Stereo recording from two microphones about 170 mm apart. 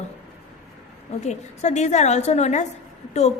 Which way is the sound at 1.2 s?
40° left (ahead or behind).